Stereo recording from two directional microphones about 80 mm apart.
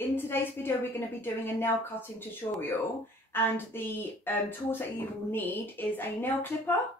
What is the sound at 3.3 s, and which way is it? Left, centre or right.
A woman's voice, left.